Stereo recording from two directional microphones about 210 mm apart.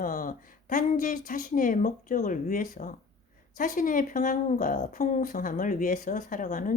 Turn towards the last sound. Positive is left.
turn(degrees=40)  # may be behind; listen again after turning